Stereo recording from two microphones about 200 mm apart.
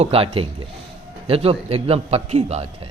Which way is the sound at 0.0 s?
30° right (ahead or behind).